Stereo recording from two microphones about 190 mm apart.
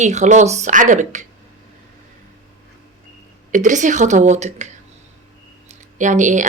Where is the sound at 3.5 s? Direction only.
40° right (ahead or behind).